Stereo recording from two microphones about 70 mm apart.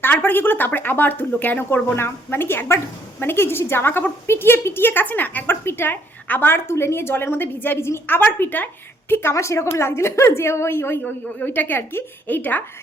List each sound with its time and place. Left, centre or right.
0.0 s a woman's voice: left
9.3 s a woman's voice: left